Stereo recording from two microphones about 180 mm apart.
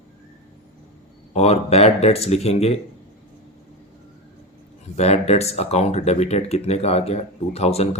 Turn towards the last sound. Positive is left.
turn(degrees=35)  # may be behind; listen again after turning